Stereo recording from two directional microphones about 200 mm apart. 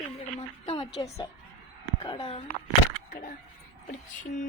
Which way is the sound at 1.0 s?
15° left (ahead or behind).